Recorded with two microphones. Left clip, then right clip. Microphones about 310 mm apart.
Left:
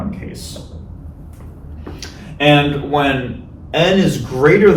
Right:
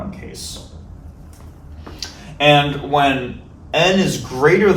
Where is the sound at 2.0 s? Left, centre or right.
Centre.